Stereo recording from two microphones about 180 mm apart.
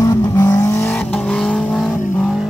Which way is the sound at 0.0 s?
20° left (ahead or behind).